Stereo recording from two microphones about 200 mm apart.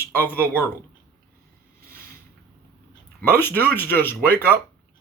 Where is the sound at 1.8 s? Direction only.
45° right (ahead or behind).